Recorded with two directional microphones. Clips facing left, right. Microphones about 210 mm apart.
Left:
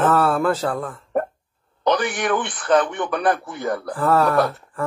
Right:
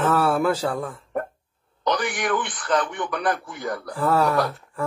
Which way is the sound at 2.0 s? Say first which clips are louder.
Left 3 dB; 25° left (ahead or behind).